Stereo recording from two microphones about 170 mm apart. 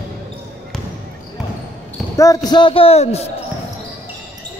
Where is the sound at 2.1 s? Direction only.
20° left (ahead or behind); by 3.2 s 40° left (ahead or behind).